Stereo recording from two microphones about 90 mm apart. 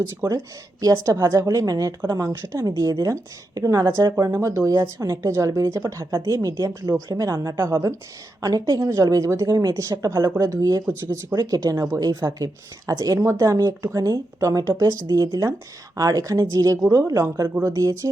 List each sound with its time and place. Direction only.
0.3 s speech: 40° right (ahead or behind)
4.3 s speech: 30° right (ahead or behind)
4.7 s a woman's voice: 45° right (ahead or behind)
8.6 s speech: 55° right (ahead or behind)
9.0 s speech: 40° right (ahead or behind)
10.8 s speech: 25° right (ahead or behind)
11.3 s speech: 40° right (ahead or behind)
11.9 s speech: 45° right (ahead or behind)
13.1 s speech: 30° right (ahead or behind)